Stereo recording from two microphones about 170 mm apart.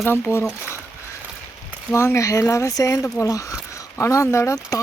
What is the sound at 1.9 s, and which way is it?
Speech, 15° left (ahead or behind).